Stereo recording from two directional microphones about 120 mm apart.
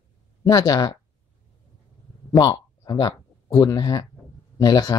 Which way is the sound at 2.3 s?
30° left (ahead or behind).